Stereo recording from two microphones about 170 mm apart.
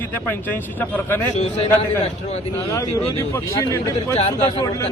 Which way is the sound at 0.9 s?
10° left (ahead or behind).